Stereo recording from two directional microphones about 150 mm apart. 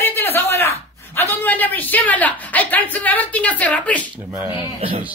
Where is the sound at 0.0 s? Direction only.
15° left (ahead or behind).